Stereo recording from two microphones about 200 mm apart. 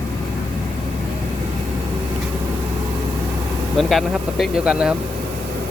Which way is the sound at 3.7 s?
Centre (ahead or behind).